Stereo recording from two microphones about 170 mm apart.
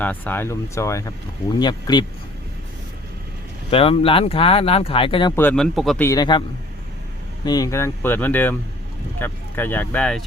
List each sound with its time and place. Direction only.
0.0 s speech: 10° left (ahead or behind)
3.7 s speech: 35° left (ahead or behind)
5.4 s speech: 5° left (ahead or behind)
6.0 s a man's voice: 20° left (ahead or behind)
7.4 s speech: 20° left (ahead or behind); by 10.2 s 5° left (ahead or behind)